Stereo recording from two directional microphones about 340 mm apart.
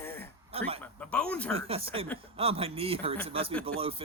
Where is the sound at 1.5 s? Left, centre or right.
Centre.